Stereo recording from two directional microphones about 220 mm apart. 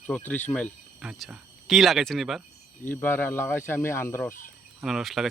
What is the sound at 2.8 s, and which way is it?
Speech, 10° left (ahead or behind).